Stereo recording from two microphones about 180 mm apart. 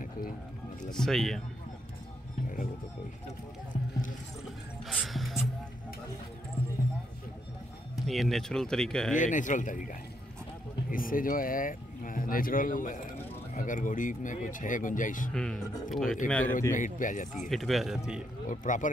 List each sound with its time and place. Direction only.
0.9 s speech: centre (ahead or behind)
4.8 s speech: centre (ahead or behind)
7.9 s speech: centre (ahead or behind)
9.1 s speech: 45° left (ahead or behind)
15.3 s a man's voice: 5° left (ahead or behind)
16.7 s speech: 45° left (ahead or behind)
17.3 s speech: centre (ahead or behind)
18.5 s speech: 45° left (ahead or behind)